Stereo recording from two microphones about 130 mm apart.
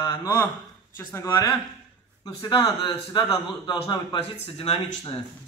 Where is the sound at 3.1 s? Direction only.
35° left (ahead or behind).